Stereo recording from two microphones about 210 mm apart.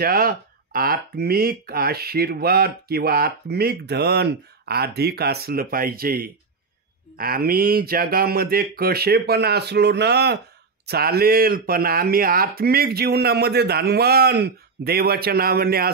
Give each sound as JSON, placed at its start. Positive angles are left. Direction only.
{"t": 0.0, "sound": "speech", "side_deg": -45}